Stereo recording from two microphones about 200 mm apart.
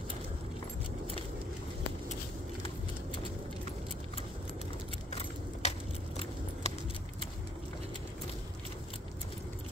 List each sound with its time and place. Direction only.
5.1 s keys jangling: 30° left (ahead or behind)